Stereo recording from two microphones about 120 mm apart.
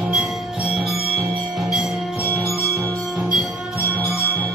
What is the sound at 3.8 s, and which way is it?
Music, 15° left (ahead or behind).